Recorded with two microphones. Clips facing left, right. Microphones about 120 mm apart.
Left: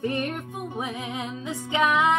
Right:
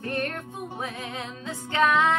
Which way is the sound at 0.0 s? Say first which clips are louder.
Left 3 dB; 10° left (ahead or behind).